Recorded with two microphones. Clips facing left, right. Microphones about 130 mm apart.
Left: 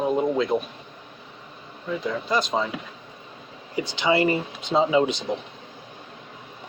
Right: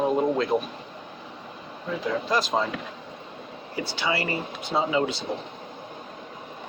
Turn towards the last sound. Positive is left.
turn(degrees=20)  # may be behind; listen again after turning